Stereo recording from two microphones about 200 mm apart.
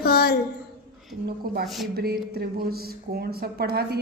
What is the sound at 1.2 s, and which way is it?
Speech, 55° right (ahead or behind).